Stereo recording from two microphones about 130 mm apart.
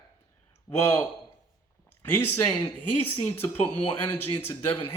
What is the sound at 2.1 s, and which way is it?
Speech, 15° left (ahead or behind).